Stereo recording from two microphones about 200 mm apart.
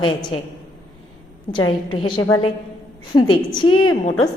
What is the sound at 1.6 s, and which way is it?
Speech, 90° left.